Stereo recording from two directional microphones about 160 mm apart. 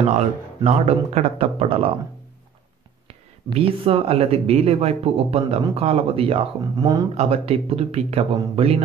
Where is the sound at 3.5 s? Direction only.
35° right (ahead or behind).